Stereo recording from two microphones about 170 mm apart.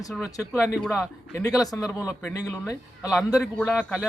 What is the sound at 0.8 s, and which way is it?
A man's voice, 5° left (ahead or behind).